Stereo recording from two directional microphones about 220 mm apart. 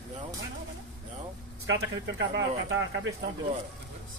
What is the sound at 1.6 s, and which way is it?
Speech, 55° right (ahead or behind).